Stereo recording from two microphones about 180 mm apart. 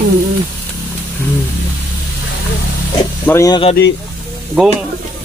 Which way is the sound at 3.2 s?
15° left (ahead or behind).